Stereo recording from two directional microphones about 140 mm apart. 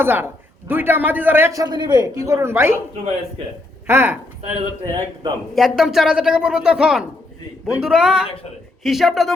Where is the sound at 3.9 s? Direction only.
15° right (ahead or behind).